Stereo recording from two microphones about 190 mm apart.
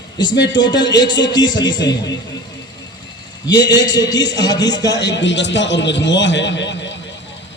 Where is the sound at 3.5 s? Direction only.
20° left (ahead or behind).